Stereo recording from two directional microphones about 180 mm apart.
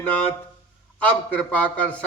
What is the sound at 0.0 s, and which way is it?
A man's voice, 10° left (ahead or behind).